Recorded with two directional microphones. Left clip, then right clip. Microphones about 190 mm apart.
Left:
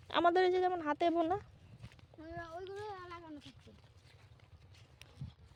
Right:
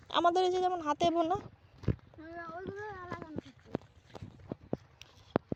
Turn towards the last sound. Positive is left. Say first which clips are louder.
# right 2 dB
turn(degrees=0)  # may be behind; listen again after turning